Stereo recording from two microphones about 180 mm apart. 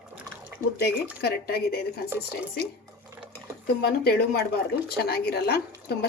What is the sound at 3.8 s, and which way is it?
A woman's voice, 60° left (ahead or behind).